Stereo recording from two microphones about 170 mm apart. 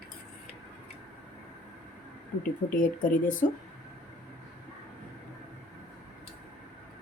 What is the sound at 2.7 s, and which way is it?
Speech, 55° left (ahead or behind).